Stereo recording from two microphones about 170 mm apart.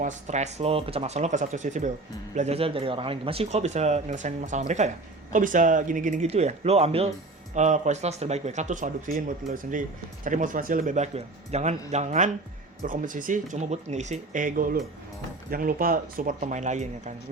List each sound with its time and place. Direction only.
0.0 s speech: 45° right (ahead or behind)